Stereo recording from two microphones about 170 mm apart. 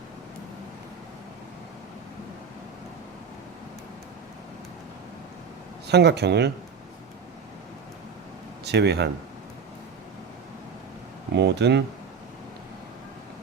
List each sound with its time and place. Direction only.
5.9 s speech: 80° right
8.6 s speech: 80° right
11.3 s speech: 85° right